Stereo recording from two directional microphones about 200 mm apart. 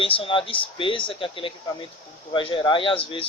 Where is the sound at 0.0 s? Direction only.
25° left (ahead or behind).